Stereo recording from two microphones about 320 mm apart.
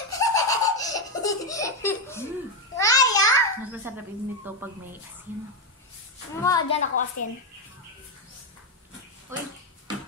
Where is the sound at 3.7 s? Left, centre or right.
Centre.